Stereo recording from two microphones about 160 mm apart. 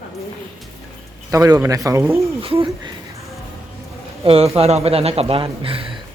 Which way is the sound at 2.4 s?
35° right (ahead or behind).